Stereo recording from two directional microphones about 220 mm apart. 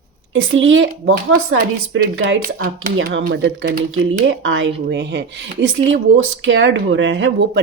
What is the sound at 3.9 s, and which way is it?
Speech, 65° right (ahead or behind).